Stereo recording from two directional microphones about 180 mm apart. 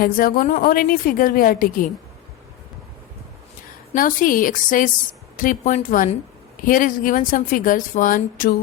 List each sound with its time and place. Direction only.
0.0 s a woman's voice: 55° left (ahead or behind)
3.9 s a woman's voice: 50° left (ahead or behind)